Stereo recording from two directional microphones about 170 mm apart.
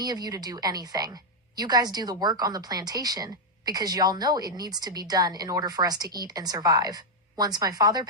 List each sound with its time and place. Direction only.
0.0 s a woman's voice: 25° right (ahead or behind)